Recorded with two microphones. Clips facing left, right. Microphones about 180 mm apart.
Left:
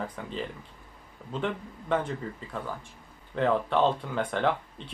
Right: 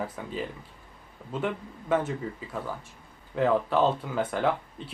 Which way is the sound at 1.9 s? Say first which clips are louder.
Right 2 dB; 5° right (ahead or behind).